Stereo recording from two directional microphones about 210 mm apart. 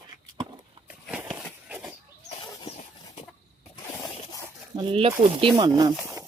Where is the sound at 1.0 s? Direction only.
5° right (ahead or behind).